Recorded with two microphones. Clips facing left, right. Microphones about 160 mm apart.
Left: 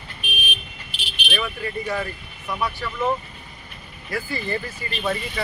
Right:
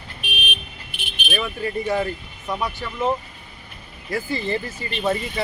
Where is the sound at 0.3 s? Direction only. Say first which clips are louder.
Right 1 dB; 60° right (ahead or behind).